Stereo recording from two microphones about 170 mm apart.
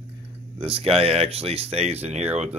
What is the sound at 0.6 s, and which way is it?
Speech, 35° right (ahead or behind).